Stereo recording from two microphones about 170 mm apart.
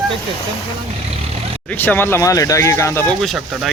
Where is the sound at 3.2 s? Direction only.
Centre (ahead or behind).